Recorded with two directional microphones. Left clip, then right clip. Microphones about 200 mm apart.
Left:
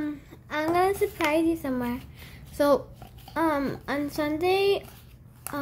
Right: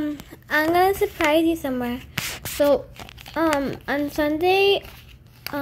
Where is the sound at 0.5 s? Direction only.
10° right (ahead or behind).